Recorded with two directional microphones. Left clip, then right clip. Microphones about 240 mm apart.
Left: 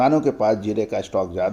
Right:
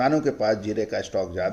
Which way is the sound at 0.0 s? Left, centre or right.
Left.